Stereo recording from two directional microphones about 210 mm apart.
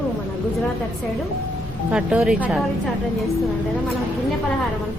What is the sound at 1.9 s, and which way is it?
Speech, 5° right (ahead or behind).